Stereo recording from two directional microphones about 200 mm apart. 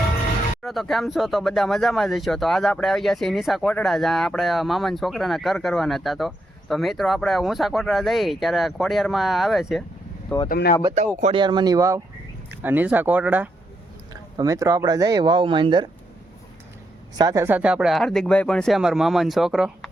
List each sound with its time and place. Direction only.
0.6 s speech: centre (ahead or behind)
10.5 s speech: 45° left (ahead or behind)
11.2 s speech: 25° right (ahead or behind); by 13.5 s 10° right (ahead or behind)
14.1 s speech: 20° right (ahead or behind)
17.2 s speech: 15° right (ahead or behind)